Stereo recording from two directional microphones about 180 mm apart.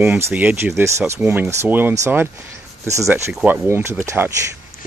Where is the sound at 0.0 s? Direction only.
10° right (ahead or behind).